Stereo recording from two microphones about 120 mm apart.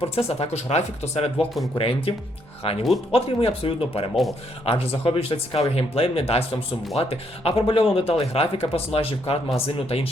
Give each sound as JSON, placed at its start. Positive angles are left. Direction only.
{"t": 0.0, "sound": "speech", "side_deg": 60}
{"t": 1.8, "sound": "speech", "side_deg": 50}
{"t": 4.1, "sound": "speech", "side_deg": 0}
{"t": 4.6, "sound": "speech", "side_deg": 55}